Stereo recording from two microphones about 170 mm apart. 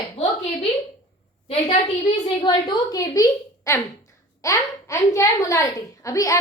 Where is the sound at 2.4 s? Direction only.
25° left (ahead or behind).